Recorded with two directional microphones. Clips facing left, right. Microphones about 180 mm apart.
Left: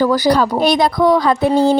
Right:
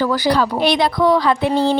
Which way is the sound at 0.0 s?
40° left (ahead or behind).